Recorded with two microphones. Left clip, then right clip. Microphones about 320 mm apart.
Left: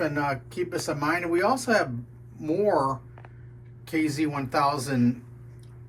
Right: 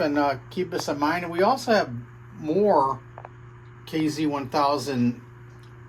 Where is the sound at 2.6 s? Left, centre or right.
Centre.